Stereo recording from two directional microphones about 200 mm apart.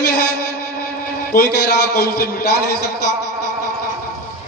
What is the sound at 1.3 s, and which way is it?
A man's voice, 50° left (ahead or behind).